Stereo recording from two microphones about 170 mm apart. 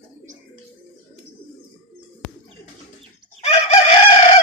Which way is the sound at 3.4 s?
40° left (ahead or behind).